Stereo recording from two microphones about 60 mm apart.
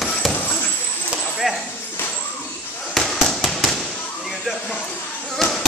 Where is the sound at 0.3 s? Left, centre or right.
Left.